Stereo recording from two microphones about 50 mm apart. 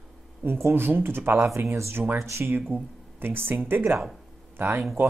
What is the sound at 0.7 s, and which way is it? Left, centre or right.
Speech, right.